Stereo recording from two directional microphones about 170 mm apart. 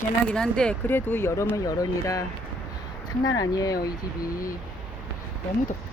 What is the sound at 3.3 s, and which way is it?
Speech, 20° left (ahead or behind).